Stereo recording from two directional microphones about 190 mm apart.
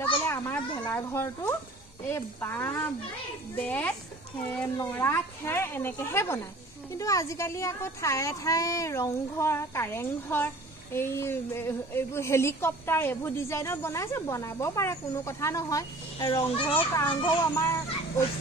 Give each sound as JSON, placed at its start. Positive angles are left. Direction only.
{"t": 0.3, "sound": "a woman's voice", "side_deg": 10}
{"t": 17.2, "sound": "a woman's voice", "side_deg": 15}